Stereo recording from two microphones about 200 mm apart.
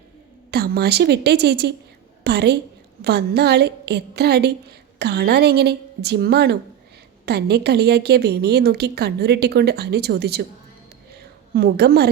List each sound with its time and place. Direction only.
0.5 s a woman's voice: 50° right (ahead or behind)
11.5 s a woman's voice: 50° right (ahead or behind)